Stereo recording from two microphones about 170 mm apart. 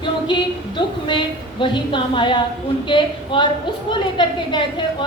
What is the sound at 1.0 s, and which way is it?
A woman's voice, 30° left (ahead or behind).